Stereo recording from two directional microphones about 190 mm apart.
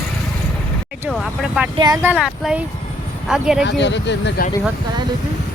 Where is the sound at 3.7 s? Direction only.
65° left (ahead or behind).